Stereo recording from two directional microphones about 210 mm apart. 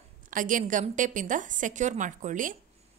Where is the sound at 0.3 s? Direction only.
40° right (ahead or behind).